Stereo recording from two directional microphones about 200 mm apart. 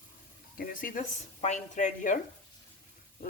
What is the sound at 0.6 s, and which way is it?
Speech, 45° left (ahead or behind).